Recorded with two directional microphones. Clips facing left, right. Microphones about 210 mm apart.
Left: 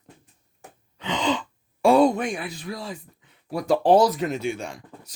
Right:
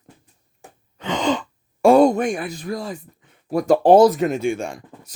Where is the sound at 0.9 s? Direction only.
50° right (ahead or behind).